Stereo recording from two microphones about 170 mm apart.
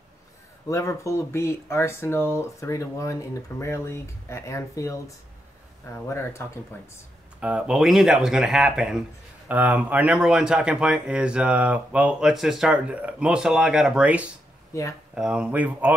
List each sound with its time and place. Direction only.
0.7 s speech: 20° left (ahead or behind)
7.3 s speech: 5° right (ahead or behind)
14.7 s speech: 20° left (ahead or behind)
15.1 s speech: 5° right (ahead or behind)